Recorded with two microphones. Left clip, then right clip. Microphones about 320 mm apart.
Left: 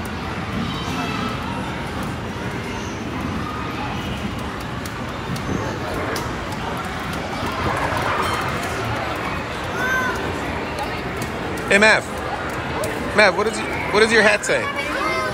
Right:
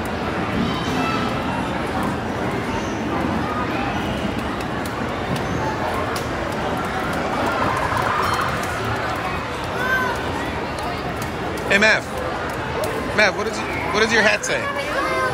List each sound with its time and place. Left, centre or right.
11.7 s a man's voice: centre
13.1 s a man's voice: centre